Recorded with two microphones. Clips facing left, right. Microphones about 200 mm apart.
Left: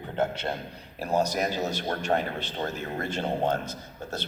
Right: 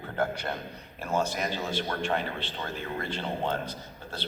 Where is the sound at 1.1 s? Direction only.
40° left (ahead or behind).